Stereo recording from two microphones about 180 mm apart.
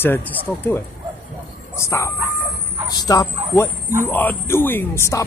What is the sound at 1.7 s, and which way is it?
Speech, 15° left (ahead or behind).